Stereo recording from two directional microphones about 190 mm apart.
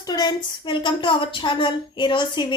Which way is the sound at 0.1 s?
20° left (ahead or behind).